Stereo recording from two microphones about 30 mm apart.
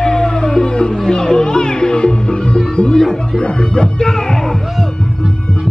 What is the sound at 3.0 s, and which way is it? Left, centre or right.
Music, centre.